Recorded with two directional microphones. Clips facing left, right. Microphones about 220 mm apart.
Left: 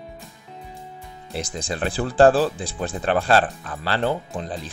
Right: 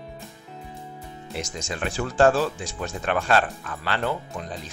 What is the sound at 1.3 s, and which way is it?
Speech, 35° left (ahead or behind).